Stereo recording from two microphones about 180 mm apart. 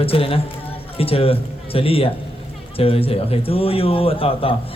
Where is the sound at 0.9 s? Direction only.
30° left (ahead or behind).